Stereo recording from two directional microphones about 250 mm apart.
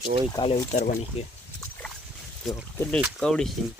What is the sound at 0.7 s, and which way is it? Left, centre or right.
Speech, left.